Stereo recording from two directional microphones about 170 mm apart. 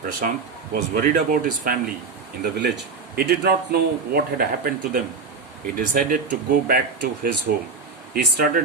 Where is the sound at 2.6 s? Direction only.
75° right (ahead or behind); by 5.0 s 60° right (ahead or behind).